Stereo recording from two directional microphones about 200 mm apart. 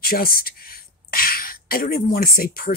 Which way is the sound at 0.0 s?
45° left (ahead or behind).